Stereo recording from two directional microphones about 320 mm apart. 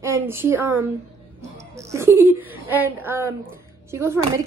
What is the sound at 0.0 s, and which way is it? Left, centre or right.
A woman's voice, centre.